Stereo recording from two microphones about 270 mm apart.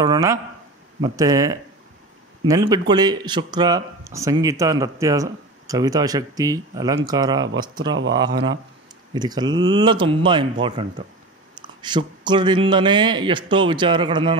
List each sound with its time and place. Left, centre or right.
0.0 s speech: centre
2.9 s speech: centre
7.9 s speech: right
8.2 s speech: centre